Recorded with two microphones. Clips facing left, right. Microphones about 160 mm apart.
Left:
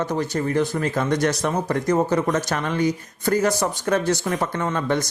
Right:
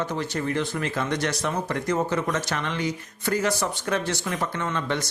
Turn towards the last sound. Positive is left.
turn(degrees=45)  # may be behind; listen again after turning